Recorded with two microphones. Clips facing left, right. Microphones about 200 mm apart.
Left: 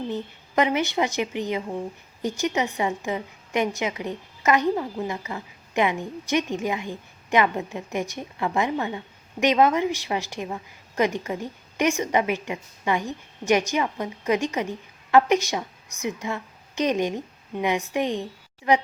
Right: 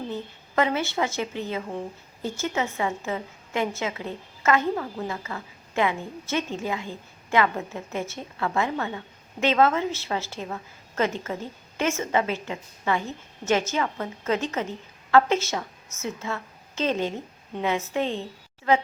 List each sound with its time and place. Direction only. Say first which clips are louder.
0.1 s a woman's voice: left 3 dB; 15° left (ahead or behind)